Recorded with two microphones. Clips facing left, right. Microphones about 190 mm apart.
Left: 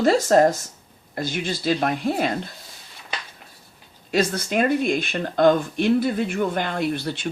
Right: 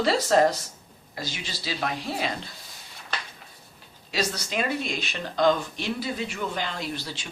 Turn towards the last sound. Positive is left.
turn(degrees=60)  # may be behind; listen again after turning